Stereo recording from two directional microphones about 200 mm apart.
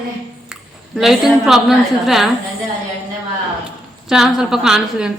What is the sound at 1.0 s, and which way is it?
A woman's voice, centre (ahead or behind).